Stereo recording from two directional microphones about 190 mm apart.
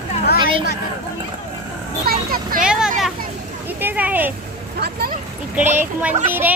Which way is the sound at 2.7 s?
5° right (ahead or behind).